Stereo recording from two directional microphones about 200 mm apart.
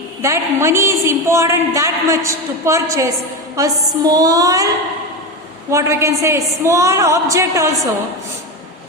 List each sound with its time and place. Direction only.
0.2 s a woman's voice: 15° right (ahead or behind)
5.7 s a woman's voice: 15° right (ahead or behind)